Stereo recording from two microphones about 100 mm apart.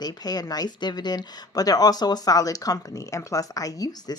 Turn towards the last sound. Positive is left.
turn(degrees=40)  # may be behind; listen again after turning